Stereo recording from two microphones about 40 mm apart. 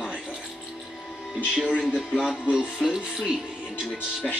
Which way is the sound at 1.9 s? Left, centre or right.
Centre.